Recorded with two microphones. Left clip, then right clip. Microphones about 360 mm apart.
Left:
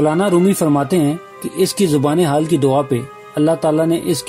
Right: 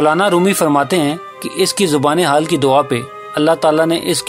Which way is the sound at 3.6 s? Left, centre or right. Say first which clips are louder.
Right 3 dB; right.